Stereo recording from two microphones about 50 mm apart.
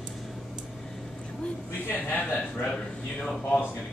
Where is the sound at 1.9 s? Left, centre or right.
Left.